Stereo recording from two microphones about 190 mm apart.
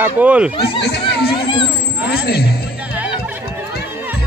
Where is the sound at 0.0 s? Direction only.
10° right (ahead or behind).